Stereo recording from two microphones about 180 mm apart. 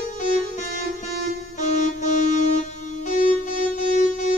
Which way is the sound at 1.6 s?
40° left (ahead or behind).